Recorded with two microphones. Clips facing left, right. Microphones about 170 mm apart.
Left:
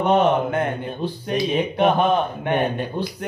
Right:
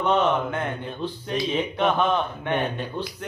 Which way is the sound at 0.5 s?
55° left (ahead or behind).